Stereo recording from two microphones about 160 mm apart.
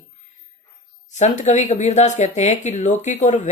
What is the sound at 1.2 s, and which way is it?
Speech, 45° left (ahead or behind).